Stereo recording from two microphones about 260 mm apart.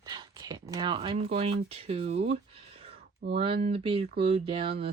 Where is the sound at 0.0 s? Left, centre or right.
Centre.